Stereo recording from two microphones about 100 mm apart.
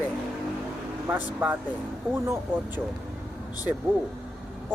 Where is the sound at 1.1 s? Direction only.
15° right (ahead or behind).